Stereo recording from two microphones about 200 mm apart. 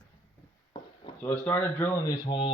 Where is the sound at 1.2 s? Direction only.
10° left (ahead or behind); by 2.5 s 25° left (ahead or behind).